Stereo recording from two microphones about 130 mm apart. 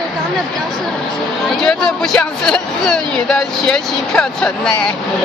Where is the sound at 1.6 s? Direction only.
5° left (ahead or behind).